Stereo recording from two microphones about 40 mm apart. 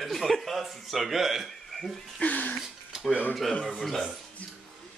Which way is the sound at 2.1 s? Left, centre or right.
Left.